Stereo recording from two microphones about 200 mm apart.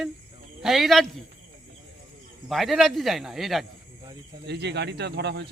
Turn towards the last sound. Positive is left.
turn(degrees=-55)  # may be behind; listen again after turning